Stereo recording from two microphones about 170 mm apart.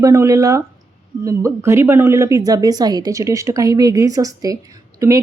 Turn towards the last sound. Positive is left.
turn(degrees=-20)  # may be behind; listen again after turning